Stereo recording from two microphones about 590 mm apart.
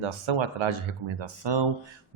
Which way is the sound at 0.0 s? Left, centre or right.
Right.